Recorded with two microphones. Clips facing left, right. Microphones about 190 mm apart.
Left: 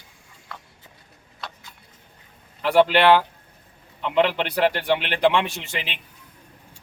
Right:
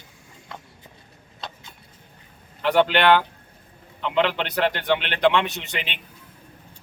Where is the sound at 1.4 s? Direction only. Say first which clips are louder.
Right 1 dB; 20° right (ahead or behind).